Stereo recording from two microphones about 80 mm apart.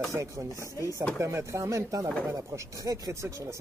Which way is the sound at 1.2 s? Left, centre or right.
Right.